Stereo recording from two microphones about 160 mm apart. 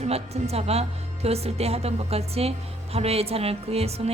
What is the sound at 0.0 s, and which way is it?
A woman's voice, 40° right (ahead or behind).